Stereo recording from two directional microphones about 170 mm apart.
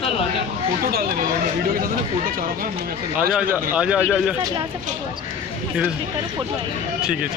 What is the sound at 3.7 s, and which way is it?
Speech, 5° right (ahead or behind).